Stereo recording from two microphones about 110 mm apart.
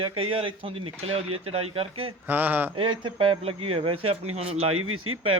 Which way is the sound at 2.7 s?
50° right (ahead or behind).